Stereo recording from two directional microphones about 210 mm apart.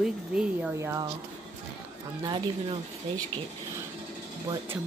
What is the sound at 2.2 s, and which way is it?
Speech, 20° right (ahead or behind).